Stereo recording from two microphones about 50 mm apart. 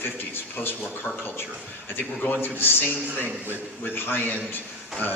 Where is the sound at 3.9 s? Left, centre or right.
Left.